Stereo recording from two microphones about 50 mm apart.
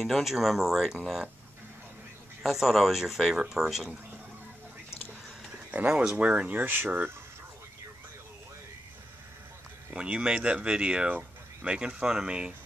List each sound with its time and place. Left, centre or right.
0.0 s a man's voice: centre
2.4 s a man's voice: centre
5.7 s speech: right
6.6 s speech: right
9.9 s speech: right